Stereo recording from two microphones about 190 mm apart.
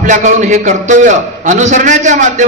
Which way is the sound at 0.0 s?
40° right (ahead or behind).